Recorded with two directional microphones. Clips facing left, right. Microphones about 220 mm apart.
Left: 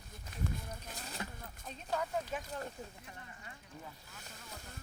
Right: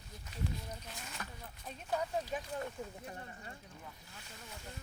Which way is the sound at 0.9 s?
35° left (ahead or behind).